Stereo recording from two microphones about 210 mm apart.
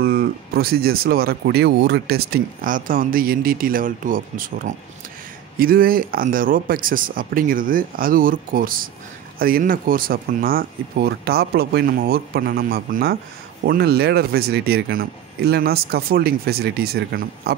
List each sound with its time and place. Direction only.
0.0 s speech: 45° right (ahead or behind)